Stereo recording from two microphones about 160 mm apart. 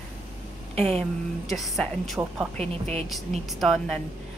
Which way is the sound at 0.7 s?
40° right (ahead or behind).